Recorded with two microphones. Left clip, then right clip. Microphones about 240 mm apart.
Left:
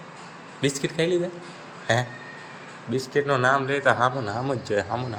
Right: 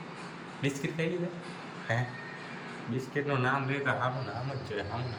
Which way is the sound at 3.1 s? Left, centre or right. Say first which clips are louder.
Left 9 dB; left.